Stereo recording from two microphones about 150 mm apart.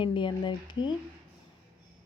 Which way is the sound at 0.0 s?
35° left (ahead or behind).